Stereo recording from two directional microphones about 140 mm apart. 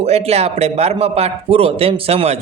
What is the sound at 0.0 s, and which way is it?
A man's voice, 50° right (ahead or behind).